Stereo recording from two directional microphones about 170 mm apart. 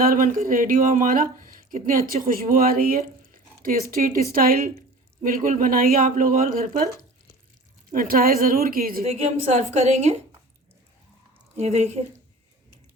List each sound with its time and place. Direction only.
0.0 s speech: 60° right (ahead or behind)
7.9 s speech: 55° right (ahead or behind)
9.0 s a woman's voice: 40° right (ahead or behind)
11.5 s a woman's voice: 40° right (ahead or behind)